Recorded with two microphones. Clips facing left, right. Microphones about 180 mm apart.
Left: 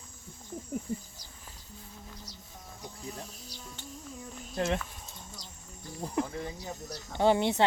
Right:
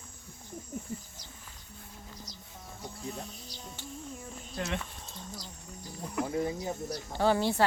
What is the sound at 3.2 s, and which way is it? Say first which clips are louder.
Music: right 1 dB; centre (ahead or behind).